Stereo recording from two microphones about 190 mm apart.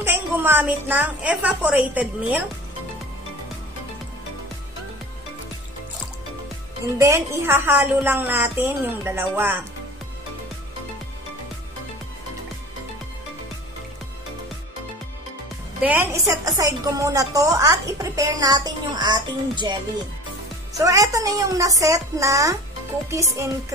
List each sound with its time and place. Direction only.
0.0 s a woman's voice: 10° right (ahead or behind)
6.8 s a woman's voice: 15° right (ahead or behind)
15.8 s a woman's voice: 10° right (ahead or behind)